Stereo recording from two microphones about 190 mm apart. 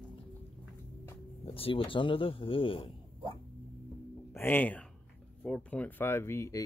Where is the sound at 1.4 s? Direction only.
30° left (ahead or behind).